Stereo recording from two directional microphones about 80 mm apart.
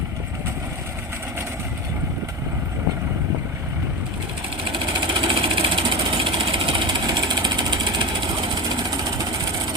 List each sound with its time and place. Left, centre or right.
4.7 s vehicle: right